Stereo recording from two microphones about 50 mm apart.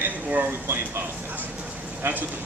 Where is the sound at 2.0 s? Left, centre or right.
Right.